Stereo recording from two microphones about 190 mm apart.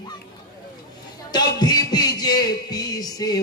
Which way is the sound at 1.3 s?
20° left (ahead or behind).